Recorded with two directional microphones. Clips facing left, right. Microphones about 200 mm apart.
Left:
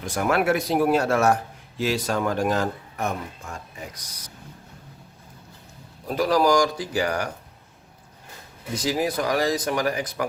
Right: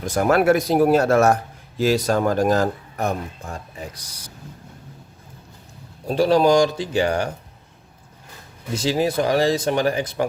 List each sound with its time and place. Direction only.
0.0 s speech: 40° right (ahead or behind)
6.1 s speech: 30° right (ahead or behind)
8.7 s speech: 30° right (ahead or behind)